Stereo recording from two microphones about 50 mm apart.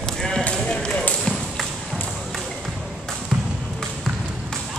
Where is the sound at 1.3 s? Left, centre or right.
Centre.